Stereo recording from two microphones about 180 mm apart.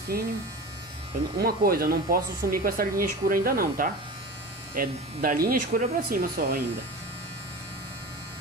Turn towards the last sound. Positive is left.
turn(degrees=-55)  # may be behind; listen again after turning